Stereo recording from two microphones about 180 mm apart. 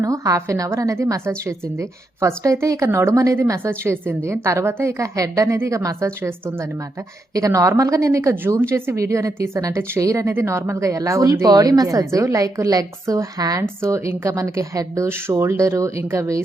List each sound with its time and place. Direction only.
0.0 s a woman's voice: 20° right (ahead or behind)